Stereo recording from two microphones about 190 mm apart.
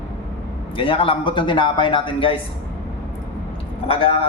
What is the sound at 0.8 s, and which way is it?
A man's voice, 30° left (ahead or behind).